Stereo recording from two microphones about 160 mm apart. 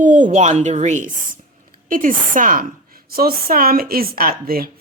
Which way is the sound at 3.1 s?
70° right (ahead or behind).